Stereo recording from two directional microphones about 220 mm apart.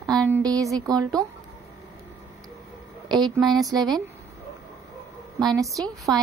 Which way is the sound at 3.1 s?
20° right (ahead or behind).